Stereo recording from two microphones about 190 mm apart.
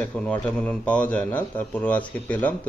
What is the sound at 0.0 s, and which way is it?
Speech, 5° left (ahead or behind).